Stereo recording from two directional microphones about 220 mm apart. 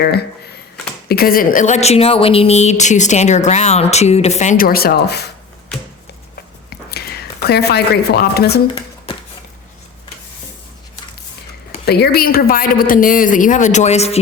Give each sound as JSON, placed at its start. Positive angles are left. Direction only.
{"t": 0.0, "sound": "speech", "side_deg": 45}
{"t": 6.7, "sound": "whispering", "side_deg": 45}
{"t": 8.6, "sound": "a sound", "side_deg": 20}
{"t": 11.9, "sound": "speech", "side_deg": 45}